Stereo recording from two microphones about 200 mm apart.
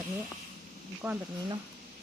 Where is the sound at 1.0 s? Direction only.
5° right (ahead or behind).